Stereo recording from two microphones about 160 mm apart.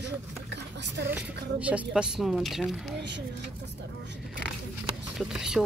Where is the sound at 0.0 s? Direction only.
90° right.